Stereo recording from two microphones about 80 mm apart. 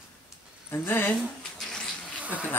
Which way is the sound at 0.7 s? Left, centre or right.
Left.